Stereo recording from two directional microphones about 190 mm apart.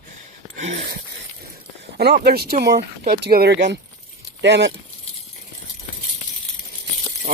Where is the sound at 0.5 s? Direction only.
40° right (ahead or behind).